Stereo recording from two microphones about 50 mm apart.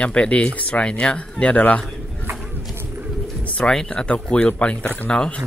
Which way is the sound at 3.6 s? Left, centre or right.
Centre.